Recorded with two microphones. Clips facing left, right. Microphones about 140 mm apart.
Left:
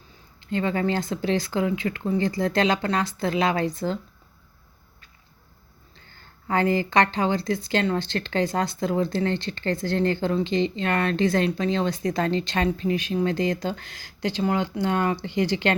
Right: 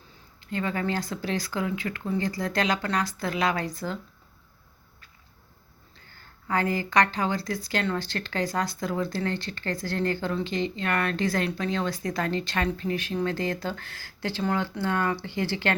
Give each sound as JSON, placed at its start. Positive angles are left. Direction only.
{"t": 0.3, "sound": "speech", "side_deg": 25}
{"t": 6.5, "sound": "speech", "side_deg": 25}